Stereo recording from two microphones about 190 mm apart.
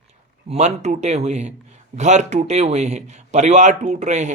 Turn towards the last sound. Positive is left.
turn(degrees=-40)  # may be behind; listen again after turning